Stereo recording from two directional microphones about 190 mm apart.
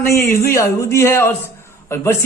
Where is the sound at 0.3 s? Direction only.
15° left (ahead or behind).